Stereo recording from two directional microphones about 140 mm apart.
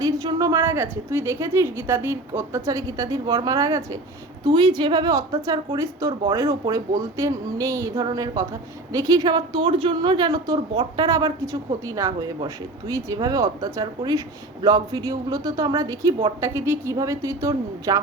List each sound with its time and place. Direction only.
0.0 s a woman's voice: 25° right (ahead or behind)